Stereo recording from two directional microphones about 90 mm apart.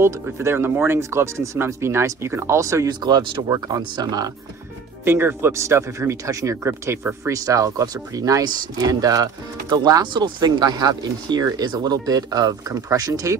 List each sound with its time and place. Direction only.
0.0 s speech: 30° right (ahead or behind)
3.0 s speech: 55° right (ahead or behind)
5.0 s speech: 25° right (ahead or behind)
7.3 s speech: 40° right (ahead or behind)